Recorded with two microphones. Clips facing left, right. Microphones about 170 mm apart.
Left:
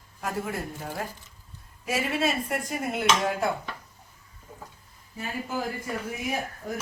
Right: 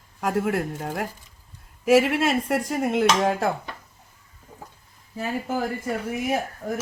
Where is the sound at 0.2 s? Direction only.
90° right.